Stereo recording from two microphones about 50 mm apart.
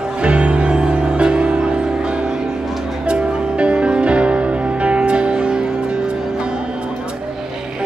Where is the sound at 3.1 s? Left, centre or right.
Right.